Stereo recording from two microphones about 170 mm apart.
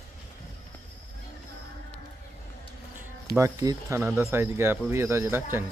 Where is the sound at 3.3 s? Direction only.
20° right (ahead or behind).